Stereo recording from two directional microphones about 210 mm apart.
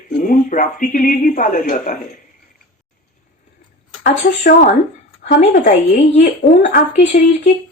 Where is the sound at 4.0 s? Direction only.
35° left (ahead or behind).